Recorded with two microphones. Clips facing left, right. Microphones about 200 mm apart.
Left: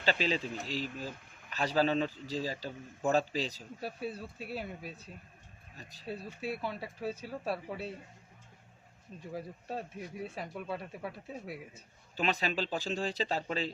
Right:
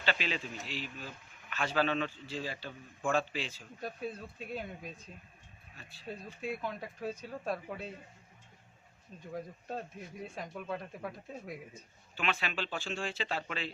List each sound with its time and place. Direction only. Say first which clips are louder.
0.0 s speech: left 4 dB; 35° left (ahead or behind)
3.8 s speech: even; 5° left (ahead or behind)
5.7 s speech: left 4 dB; 40° left (ahead or behind)
6.1 s speech: left 1 dB; 5° left (ahead or behind)
9.3 s speech: even; 5° left (ahead or behind)
12.1 s speech: left 3 dB; 40° left (ahead or behind)